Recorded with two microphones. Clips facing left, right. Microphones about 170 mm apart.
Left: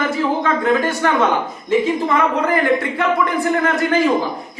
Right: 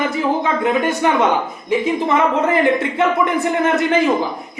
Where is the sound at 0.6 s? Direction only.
20° right (ahead or behind).